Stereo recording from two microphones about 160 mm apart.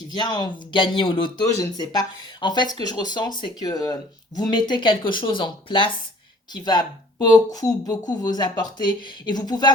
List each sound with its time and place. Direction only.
0.1 s speech: 25° left (ahead or behind)